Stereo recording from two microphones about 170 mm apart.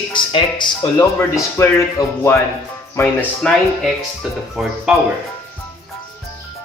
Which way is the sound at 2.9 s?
15° left (ahead or behind).